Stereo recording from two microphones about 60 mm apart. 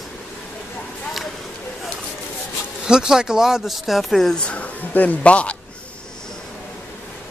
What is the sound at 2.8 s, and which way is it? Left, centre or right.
Speech, centre.